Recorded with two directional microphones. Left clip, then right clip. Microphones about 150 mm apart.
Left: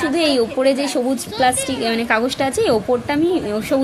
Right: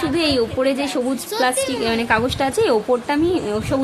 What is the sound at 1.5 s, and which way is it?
Speech, 40° right (ahead or behind).